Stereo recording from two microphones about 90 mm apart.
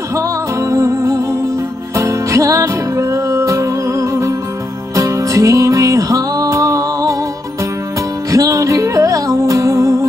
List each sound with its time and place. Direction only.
0.1 s music: 35° right (ahead or behind)
8.3 s music: 40° right (ahead or behind)